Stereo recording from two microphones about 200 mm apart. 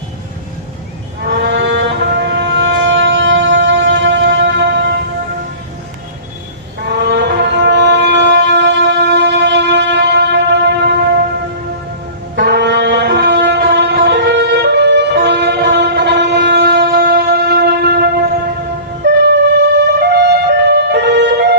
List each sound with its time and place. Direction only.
1.3 s music: 60° right (ahead or behind)
6.8 s shofar: 55° right (ahead or behind)
12.4 s wind instrument: 55° right (ahead or behind)
19.0 s music: 55° right (ahead or behind)